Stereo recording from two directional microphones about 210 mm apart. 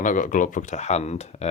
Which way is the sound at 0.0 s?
40° left (ahead or behind).